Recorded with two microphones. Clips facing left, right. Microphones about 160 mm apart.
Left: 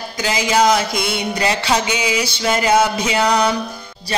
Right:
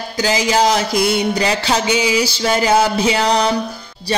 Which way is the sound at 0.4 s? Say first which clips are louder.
Left 2 dB; 30° right (ahead or behind).